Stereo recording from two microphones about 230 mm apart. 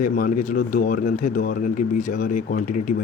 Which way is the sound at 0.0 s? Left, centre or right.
Left.